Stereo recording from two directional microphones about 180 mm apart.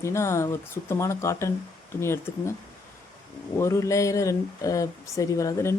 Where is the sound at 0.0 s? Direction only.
15° left (ahead or behind).